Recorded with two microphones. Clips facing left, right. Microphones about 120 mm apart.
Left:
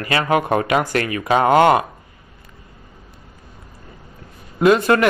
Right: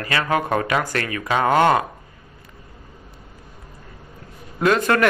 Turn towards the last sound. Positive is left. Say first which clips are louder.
# left 4 dB
turn(degrees=10)  # may be behind; listen again after turning